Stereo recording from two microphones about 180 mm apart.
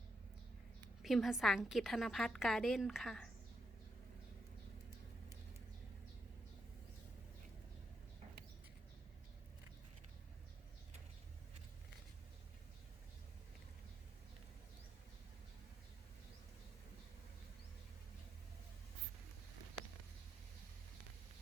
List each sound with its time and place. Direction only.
1.0 s a woman's voice: centre (ahead or behind)